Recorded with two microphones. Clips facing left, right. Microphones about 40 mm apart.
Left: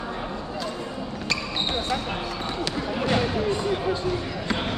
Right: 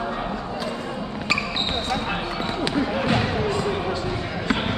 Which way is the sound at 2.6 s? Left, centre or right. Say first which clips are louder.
Right 4 dB; centre.